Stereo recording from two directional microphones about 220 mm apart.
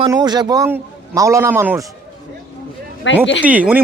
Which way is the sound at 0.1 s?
20° right (ahead or behind).